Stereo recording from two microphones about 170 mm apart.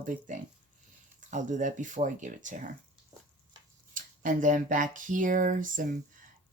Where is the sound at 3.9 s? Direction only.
50° right (ahead or behind).